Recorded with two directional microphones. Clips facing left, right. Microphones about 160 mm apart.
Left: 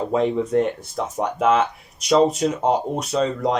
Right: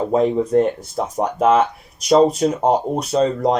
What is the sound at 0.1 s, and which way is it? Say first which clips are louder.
Speech: right 3 dB; 40° right (ahead or behind).